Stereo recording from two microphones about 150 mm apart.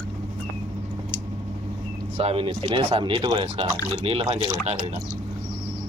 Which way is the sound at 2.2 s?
40° right (ahead or behind).